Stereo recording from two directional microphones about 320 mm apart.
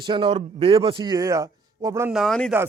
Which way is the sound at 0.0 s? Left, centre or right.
Centre.